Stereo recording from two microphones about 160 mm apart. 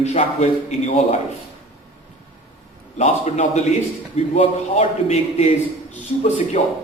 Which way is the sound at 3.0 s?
45° left (ahead or behind).